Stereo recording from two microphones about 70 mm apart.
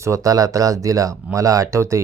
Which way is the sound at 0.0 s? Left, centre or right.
Right.